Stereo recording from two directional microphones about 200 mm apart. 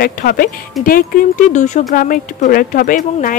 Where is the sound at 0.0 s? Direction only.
45° left (ahead or behind).